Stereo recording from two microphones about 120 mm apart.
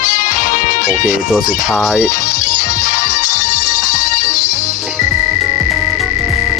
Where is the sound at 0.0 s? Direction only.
90° left.